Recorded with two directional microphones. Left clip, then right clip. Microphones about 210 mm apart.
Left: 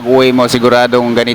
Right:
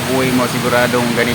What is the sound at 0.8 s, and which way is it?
Speech, 50° left (ahead or behind).